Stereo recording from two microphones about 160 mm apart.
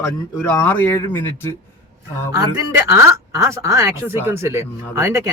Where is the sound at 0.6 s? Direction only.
10° left (ahead or behind).